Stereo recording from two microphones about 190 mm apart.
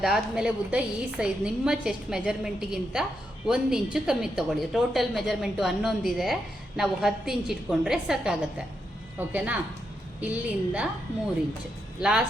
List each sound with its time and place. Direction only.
0.0 s a woman's voice: 5° right (ahead or behind)
11.9 s a woman's voice: 5° right (ahead or behind)